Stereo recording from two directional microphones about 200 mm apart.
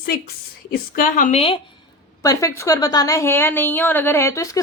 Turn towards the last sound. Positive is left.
turn(degrees=15)  # may be behind; listen again after turning